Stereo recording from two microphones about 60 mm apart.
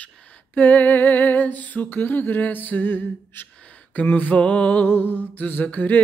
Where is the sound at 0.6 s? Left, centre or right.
Left.